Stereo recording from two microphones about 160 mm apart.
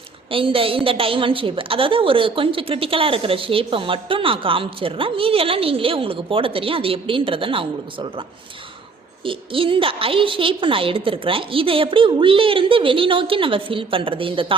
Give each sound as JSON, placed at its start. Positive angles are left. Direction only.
{"t": 0.3, "sound": "a woman's voice", "side_deg": -35}
{"t": 9.2, "sound": "a woman's voice", "side_deg": -35}